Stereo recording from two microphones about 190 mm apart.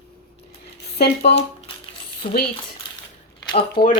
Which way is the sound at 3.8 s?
25° left (ahead or behind).